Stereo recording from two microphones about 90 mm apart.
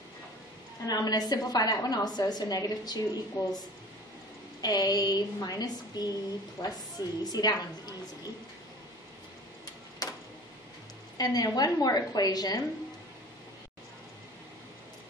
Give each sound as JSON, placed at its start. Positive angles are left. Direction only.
{"t": 0.8, "sound": "a woman's voice", "side_deg": 45}
{"t": 4.6, "sound": "a woman's voice", "side_deg": 45}
{"t": 10.0, "sound": "a sound", "side_deg": 45}
{"t": 11.1, "sound": "a woman's voice", "side_deg": 45}